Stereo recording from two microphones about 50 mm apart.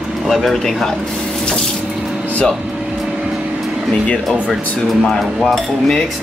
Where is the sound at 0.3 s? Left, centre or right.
Centre.